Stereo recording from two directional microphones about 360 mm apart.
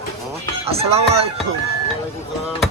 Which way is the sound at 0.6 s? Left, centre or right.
Centre.